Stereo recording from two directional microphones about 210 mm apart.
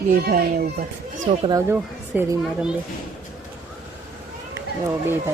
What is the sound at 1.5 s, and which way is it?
A child's voice, 15° right (ahead or behind).